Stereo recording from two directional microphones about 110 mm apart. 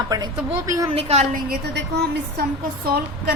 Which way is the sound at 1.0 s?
75° right (ahead or behind).